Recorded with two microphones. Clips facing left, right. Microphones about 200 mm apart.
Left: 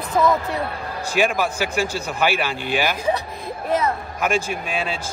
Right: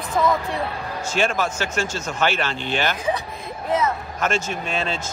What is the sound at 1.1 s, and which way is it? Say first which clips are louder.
Speech: left 2 dB; 10° left (ahead or behind).